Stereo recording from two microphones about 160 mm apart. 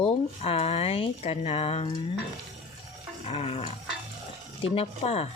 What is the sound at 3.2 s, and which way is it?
Speech, 35° left (ahead or behind).